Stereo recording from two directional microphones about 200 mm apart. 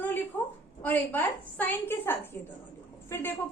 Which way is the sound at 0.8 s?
10° left (ahead or behind).